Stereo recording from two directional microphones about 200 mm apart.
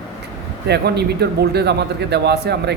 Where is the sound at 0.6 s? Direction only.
55° right (ahead or behind).